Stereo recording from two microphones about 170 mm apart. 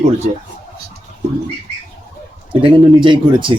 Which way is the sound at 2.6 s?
25° right (ahead or behind).